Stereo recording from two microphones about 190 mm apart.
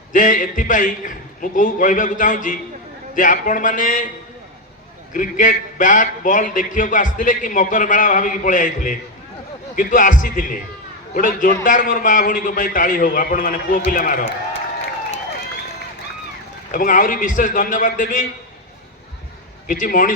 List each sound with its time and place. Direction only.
0.1 s a man's voice: 45° left (ahead or behind)
5.1 s a man's voice: 45° left (ahead or behind)
16.7 s a man's voice: 45° left (ahead or behind)
19.6 s a man's voice: 45° left (ahead or behind)